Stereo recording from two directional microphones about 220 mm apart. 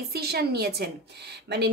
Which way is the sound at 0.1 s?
45° right (ahead or behind).